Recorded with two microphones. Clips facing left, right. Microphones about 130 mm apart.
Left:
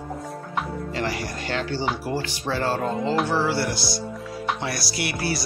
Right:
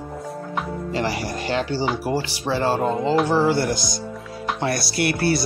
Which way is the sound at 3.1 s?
Centre (ahead or behind).